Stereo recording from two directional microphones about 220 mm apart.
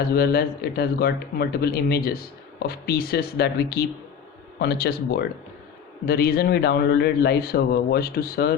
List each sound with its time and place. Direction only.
0.1 s speech: 45° left (ahead or behind)